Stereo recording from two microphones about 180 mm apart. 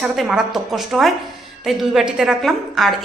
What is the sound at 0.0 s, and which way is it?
A woman's voice, centre (ahead or behind).